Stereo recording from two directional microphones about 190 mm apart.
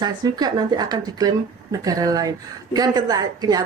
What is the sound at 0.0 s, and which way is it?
Speech, 20° right (ahead or behind).